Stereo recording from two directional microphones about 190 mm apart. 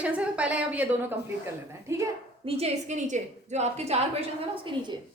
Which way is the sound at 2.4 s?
30° right (ahead or behind).